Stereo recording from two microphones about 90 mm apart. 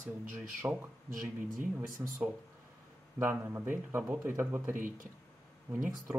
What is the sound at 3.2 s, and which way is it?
Speech, 25° right (ahead or behind).